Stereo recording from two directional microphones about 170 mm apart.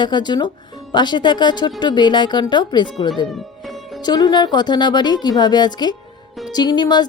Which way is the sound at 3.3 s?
Centre (ahead or behind).